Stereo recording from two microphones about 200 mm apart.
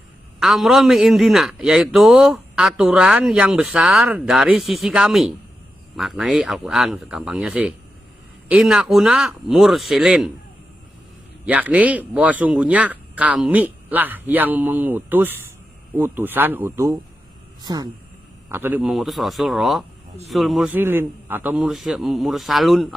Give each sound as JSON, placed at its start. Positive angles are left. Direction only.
{"t": 0.3, "sound": "a man's voice", "side_deg": 0}
{"t": 11.4, "sound": "a man's voice", "side_deg": -5}